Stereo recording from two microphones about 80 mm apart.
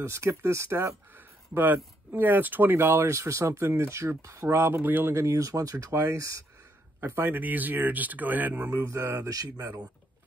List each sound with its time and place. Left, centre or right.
0.0 s speech: right
7.0 s speech: right
8.7 s speech: right
9.3 s speech: right